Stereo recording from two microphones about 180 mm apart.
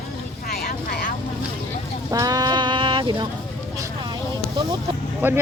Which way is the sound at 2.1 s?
20° right (ahead or behind).